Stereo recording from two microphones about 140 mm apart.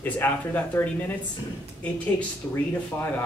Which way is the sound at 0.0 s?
15° left (ahead or behind).